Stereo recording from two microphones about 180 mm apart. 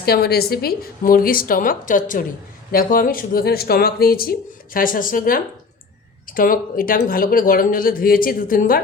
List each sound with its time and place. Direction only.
0.0 s speech: 60° left (ahead or behind)